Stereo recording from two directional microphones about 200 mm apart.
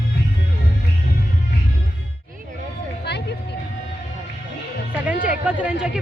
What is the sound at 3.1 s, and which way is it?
Vehicle, 55° left (ahead or behind).